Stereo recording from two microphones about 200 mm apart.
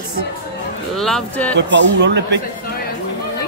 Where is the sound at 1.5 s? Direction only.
60° right (ahead or behind).